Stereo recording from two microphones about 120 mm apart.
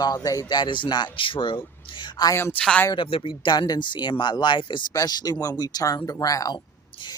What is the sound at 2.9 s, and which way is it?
Speech, 45° left (ahead or behind).